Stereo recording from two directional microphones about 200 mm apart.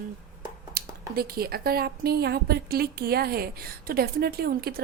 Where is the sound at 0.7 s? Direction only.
50° right (ahead or behind).